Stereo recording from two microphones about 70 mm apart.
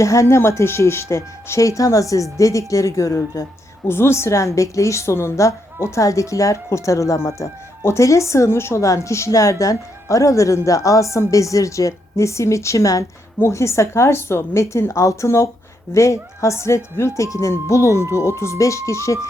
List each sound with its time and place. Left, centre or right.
0.0 s a woman's voice: left
3.8 s a woman's voice: left